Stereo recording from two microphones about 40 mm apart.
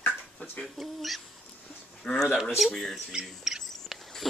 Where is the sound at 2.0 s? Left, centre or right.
Centre.